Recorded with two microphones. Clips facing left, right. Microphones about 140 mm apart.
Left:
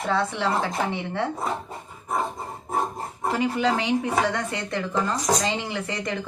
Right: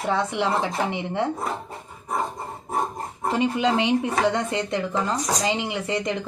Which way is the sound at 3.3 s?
20° right (ahead or behind).